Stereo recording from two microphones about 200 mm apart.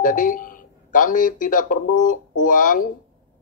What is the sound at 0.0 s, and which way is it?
A man's voice, 40° left (ahead or behind).